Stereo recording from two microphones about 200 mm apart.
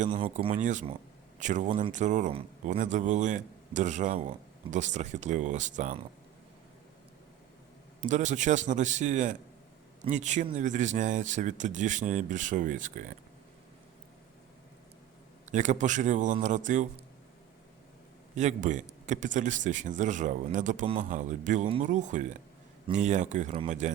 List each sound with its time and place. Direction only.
0.3 s a man's voice: 40° right (ahead or behind)
8.0 s a man's voice: 40° right (ahead or behind)
15.4 s a man's voice: 35° right (ahead or behind)
18.3 s a man's voice: 35° right (ahead or behind)